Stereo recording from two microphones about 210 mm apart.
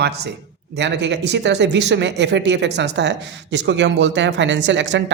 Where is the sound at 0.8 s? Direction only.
55° right (ahead or behind).